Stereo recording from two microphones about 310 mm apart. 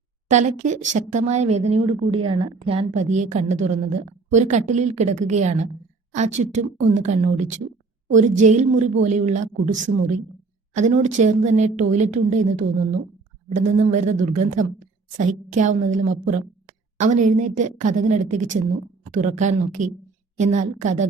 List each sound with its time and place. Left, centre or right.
0.3 s a woman's voice: right